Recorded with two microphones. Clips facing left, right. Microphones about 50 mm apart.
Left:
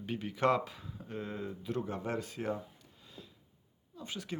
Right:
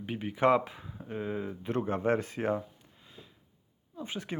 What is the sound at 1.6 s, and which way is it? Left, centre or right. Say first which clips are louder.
Speech: right 8 dB; right.